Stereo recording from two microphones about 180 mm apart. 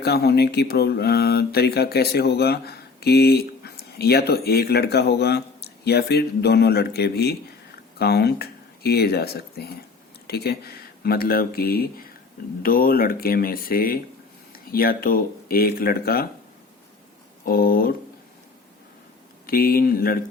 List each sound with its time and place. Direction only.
0.0 s speech: 60° left (ahead or behind)
17.4 s speech: 55° left (ahead or behind)
19.5 s speech: 55° left (ahead or behind)